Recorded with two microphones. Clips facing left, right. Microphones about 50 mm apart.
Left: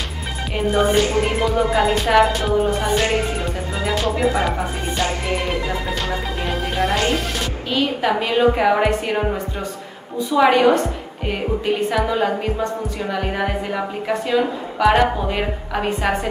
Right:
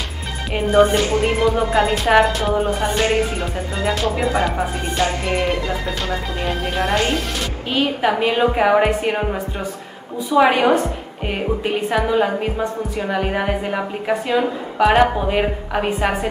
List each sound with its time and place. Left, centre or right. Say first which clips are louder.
0.6 s music: right 2 dB; centre
7.7 s a woman's voice: right 1 dB; centre
10.3 s a woman's voice: even; centre